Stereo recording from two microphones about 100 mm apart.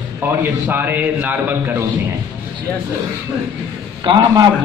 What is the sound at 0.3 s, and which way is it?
A man's voice, 20° right (ahead or behind).